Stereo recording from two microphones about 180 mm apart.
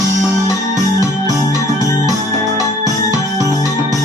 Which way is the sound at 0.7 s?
20° right (ahead or behind).